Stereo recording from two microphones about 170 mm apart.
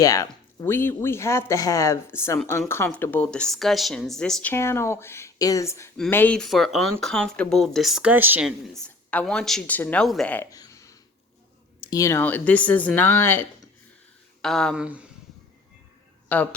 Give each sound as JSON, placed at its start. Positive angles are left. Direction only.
{"t": 0.0, "sound": "speech", "side_deg": 20}
{"t": 4.5, "sound": "speech", "side_deg": 15}
{"t": 10.5, "sound": "a sound", "side_deg": 20}
{"t": 11.8, "sound": "speech", "side_deg": 20}
{"t": 14.8, "sound": "speech", "side_deg": -5}
{"t": 16.3, "sound": "speech", "side_deg": 10}